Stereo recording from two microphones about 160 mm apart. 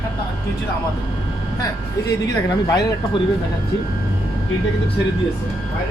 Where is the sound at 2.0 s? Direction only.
20° left (ahead or behind).